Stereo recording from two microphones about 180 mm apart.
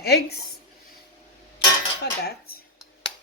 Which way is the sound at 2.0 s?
60° left (ahead or behind).